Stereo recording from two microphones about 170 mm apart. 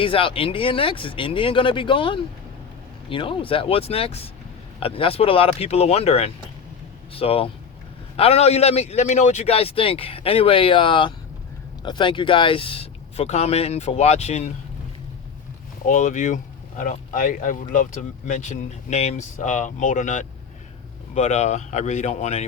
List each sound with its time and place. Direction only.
0.0 s a man's voice: 30° left (ahead or behind)
15.9 s a man's voice: 45° left (ahead or behind)